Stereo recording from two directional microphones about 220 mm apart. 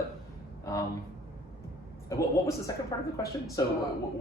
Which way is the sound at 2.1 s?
15° left (ahead or behind).